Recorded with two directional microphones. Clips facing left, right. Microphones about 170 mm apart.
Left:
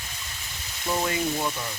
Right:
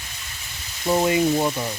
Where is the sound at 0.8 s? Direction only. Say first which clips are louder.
Right 8 dB; 25° right (ahead or behind).